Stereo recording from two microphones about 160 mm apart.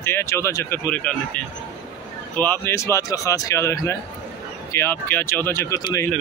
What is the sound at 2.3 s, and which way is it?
Speech, 10° left (ahead or behind).